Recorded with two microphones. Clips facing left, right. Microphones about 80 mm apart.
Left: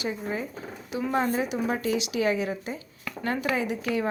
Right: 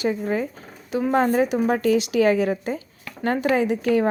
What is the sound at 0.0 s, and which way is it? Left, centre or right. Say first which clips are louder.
Speech: right 7 dB; right.